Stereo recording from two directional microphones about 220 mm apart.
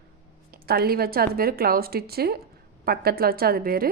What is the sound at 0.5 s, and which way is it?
Speech, 45° right (ahead or behind).